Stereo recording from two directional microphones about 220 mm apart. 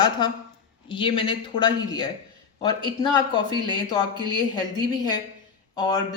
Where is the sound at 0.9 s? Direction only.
20° left (ahead or behind).